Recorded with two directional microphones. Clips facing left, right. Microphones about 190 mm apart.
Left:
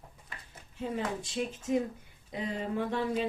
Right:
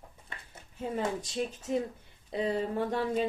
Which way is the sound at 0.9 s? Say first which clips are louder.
Right 2 dB; 40° right (ahead or behind).